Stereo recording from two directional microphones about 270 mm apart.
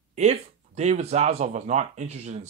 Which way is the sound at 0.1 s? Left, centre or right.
Right.